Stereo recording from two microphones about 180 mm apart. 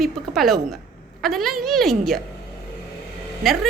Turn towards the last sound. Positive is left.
turn(degrees=0)  # may be behind; listen again after turning